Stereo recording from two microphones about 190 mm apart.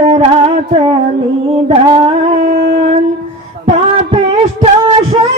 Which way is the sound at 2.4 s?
35° right (ahead or behind).